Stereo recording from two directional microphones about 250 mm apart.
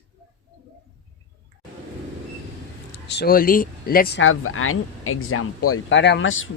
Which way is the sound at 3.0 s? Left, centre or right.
Left.